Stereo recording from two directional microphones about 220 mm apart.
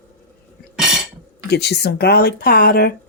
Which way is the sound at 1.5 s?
50° left (ahead or behind).